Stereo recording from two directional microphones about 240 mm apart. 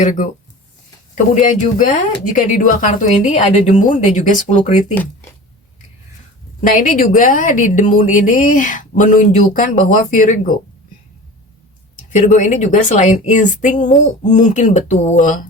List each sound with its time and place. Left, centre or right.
0.0 s a woman's voice: left
6.6 s a woman's voice: left
12.1 s a woman's voice: left